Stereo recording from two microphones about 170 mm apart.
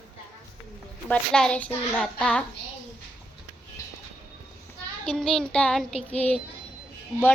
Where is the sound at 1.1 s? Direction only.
5° left (ahead or behind).